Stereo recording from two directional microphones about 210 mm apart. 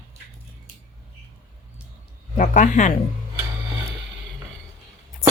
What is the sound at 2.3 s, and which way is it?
Speech, 40° left (ahead or behind).